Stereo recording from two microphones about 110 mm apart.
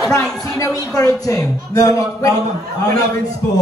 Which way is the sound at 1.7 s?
30° left (ahead or behind).